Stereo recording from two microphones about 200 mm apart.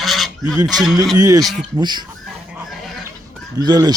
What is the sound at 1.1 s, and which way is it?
Speech, 15° right (ahead or behind).